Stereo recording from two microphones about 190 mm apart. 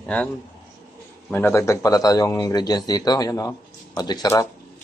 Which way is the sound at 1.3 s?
15° left (ahead or behind).